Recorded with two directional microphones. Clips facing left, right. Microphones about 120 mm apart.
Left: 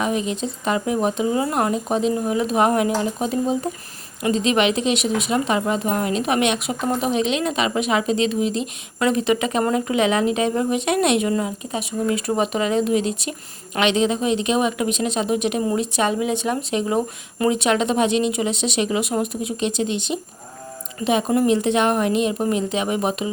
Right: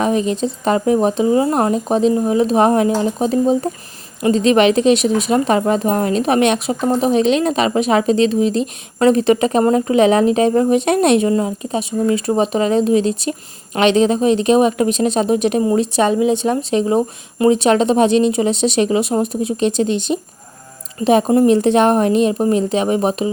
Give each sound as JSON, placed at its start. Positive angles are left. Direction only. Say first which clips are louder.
{"t": 0.0, "sound": "a woman's voice", "louder": "right 6 dB", "side_deg": -35}
{"t": 6.8, "sound": "speech", "louder": "right 6 dB", "side_deg": -25}
{"t": 7.1, "sound": "a woman's voice", "louder": "right 7 dB", "side_deg": -40}